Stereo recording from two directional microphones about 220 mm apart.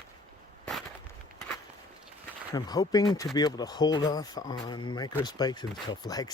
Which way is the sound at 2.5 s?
15° left (ahead or behind).